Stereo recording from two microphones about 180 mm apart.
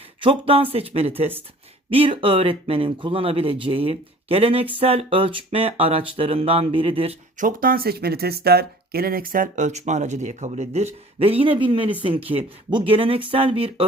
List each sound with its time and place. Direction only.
0.2 s speech: 30° right (ahead or behind)
7.4 s speech: 50° right (ahead or behind); by 13.8 s 30° right (ahead or behind)